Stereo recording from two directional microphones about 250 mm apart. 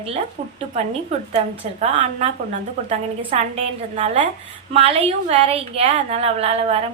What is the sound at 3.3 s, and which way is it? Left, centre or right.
A woman's voice, right.